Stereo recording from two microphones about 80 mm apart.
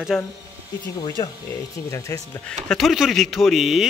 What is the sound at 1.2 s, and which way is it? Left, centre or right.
Speech, left.